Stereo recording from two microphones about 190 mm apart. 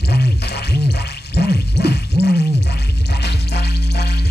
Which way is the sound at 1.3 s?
60° left (ahead or behind).